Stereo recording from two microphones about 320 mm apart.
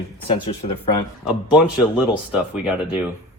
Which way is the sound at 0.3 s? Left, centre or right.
Centre.